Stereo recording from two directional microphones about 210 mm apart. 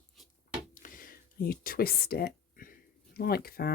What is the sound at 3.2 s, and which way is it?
Speech, 45° left (ahead or behind).